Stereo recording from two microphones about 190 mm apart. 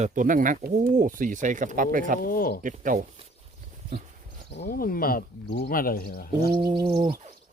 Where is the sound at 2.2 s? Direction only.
50° left (ahead or behind).